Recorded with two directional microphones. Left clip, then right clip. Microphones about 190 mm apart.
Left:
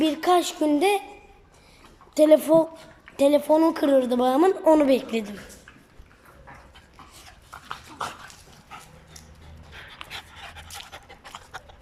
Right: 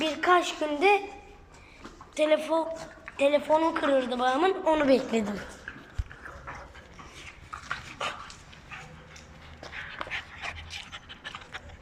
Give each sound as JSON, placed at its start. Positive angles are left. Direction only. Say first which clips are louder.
{"t": 0.2, "sound": "music", "louder": "left 2 dB", "side_deg": 20}
{"t": 2.1, "sound": "speech", "louder": "left 8 dB", "side_deg": 35}
{"t": 4.9, "sound": "a woman's voice", "louder": "left 1 dB", "side_deg": 20}
{"t": 10.6, "sound": "pant", "louder": "even", "side_deg": 35}